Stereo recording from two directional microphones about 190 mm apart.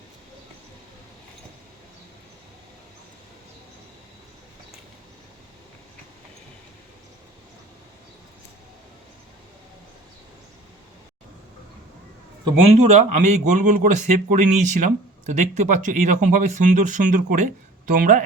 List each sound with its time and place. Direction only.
12.7 s a man's voice: 35° right (ahead or behind)